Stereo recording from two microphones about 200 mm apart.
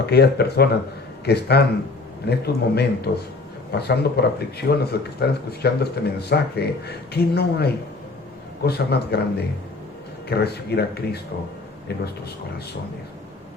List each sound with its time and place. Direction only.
0.0 s speech: 55° left (ahead or behind)
10.2 s speech: 55° left (ahead or behind)